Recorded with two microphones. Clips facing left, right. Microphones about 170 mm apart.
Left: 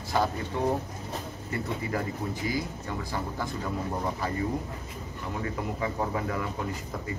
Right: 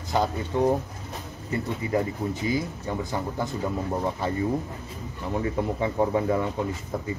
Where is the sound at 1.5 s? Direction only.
25° right (ahead or behind).